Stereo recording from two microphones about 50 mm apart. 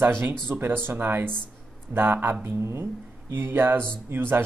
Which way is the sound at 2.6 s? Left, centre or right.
Right.